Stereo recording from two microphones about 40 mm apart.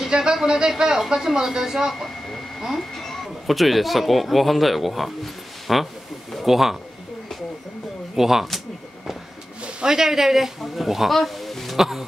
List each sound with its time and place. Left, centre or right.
0.1 s speech: centre
2.9 s speech: centre
8.2 s speech: centre
9.6 s a sound: right
9.8 s speech: centre